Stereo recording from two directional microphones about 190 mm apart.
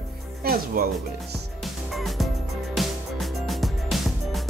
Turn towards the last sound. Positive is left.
turn(degrees=0)  # may be behind; listen again after turning